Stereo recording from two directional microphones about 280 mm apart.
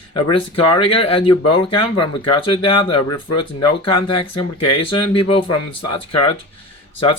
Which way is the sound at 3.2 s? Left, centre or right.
Left.